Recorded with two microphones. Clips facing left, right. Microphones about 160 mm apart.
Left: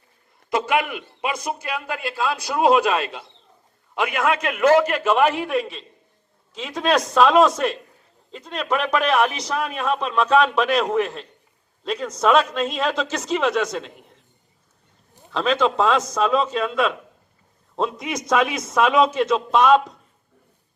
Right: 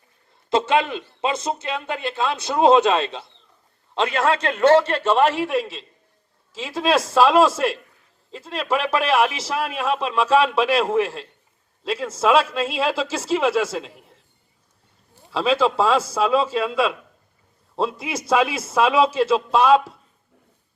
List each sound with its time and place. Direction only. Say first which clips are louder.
0.5 s a man's voice: right 2 dB; 25° right (ahead or behind)
5.2 s a man's voice: even; centre (ahead or behind)
15.3 s a man's voice: right 1 dB; 5° right (ahead or behind)
18.3 s a man's voice: right 1 dB; 30° right (ahead or behind)
19.6 s a man's voice: even; 5° right (ahead or behind)